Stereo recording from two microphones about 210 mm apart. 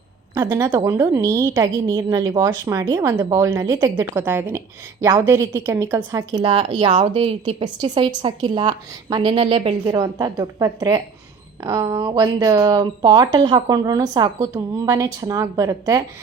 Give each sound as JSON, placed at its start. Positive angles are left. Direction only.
{"t": 0.3, "sound": "a woman's voice", "side_deg": -10}